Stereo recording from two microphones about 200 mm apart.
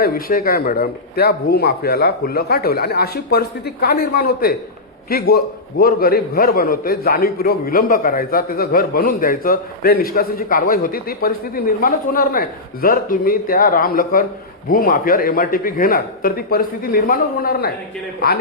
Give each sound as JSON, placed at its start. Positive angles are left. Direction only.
{"t": 0.0, "sound": "a man's voice", "side_deg": 45}